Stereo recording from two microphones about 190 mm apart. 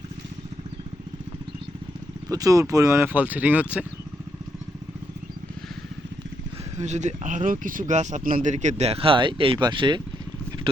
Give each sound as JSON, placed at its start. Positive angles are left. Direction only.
{"t": 2.3, "sound": "speech", "side_deg": -20}
{"t": 6.7, "sound": "speech", "side_deg": -35}